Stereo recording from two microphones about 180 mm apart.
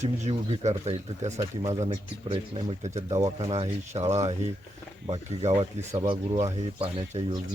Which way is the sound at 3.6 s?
35° right (ahead or behind).